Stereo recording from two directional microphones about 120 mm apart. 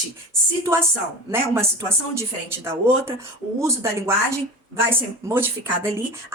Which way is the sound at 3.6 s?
25° right (ahead or behind).